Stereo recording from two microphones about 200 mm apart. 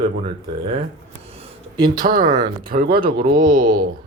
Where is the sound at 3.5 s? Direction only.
45° right (ahead or behind).